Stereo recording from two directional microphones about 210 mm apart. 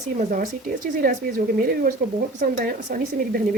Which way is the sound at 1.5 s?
40° right (ahead or behind).